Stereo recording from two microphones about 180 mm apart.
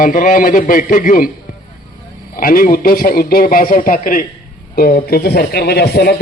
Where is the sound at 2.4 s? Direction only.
50° left (ahead or behind).